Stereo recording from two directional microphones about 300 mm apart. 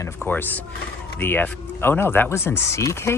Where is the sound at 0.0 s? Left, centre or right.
Centre.